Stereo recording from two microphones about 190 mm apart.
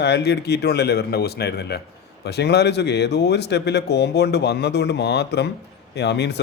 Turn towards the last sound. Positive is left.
turn(degrees=60)  # may be behind; listen again after turning